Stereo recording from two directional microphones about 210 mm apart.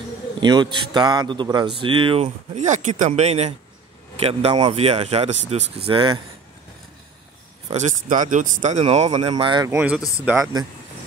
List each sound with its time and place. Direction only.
0.4 s speech: 20° right (ahead or behind)
7.7 s speech: 35° right (ahead or behind)
9.3 s speech: 20° right (ahead or behind)
9.8 s speech: 5° right (ahead or behind)